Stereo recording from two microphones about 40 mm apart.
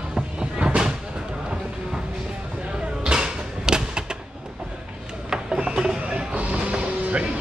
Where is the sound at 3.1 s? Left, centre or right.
Centre.